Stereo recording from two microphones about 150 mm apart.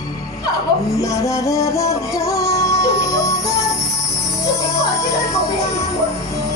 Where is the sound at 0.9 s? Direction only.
20° left (ahead or behind).